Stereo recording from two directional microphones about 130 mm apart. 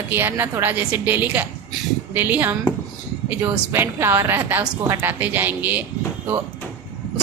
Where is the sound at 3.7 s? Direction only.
20° right (ahead or behind).